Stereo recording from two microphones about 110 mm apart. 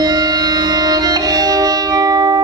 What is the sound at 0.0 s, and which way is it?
Music, 40° right (ahead or behind).